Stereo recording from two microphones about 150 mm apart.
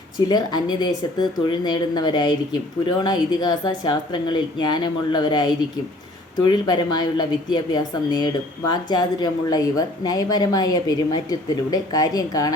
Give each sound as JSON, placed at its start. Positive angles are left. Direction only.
{"t": 0.3, "sound": "a woman's voice", "side_deg": 25}